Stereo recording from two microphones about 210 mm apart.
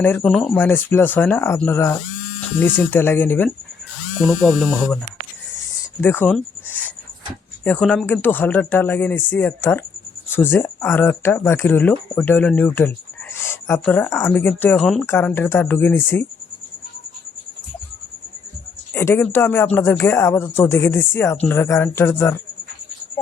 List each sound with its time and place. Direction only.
0.0 s speech: 5° left (ahead or behind)
6.0 s speech: 10° left (ahead or behind)
18.9 s speech: 10° left (ahead or behind)